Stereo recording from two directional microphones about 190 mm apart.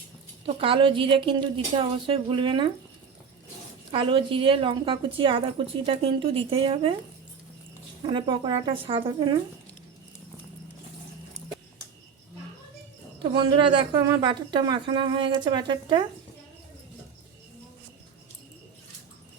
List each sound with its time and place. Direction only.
0.4 s a woman's voice: 30° right (ahead or behind)
3.9 s a woman's voice: 25° right (ahead or behind)
8.1 s a woman's voice: 25° right (ahead or behind)
13.3 s a woman's voice: 25° right (ahead or behind)